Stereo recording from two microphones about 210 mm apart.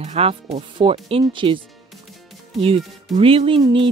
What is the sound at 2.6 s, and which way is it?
Speech, 25° right (ahead or behind).